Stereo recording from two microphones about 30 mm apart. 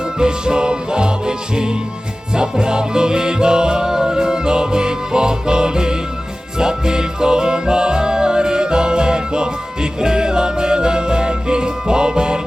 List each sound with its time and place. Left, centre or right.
0.2 s music: right